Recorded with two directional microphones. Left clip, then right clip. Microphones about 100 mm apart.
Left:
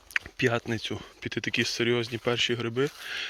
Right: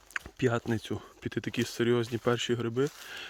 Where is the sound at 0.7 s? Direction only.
90° right.